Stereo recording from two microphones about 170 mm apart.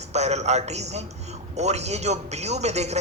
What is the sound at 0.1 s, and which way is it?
A man's voice, 40° right (ahead or behind).